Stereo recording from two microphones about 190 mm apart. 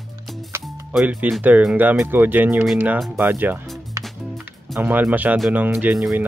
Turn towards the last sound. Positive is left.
turn(degrees=-5)  # may be behind; listen again after turning